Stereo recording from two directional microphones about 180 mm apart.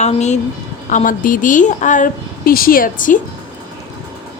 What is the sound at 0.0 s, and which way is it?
A woman's voice, 40° left (ahead or behind).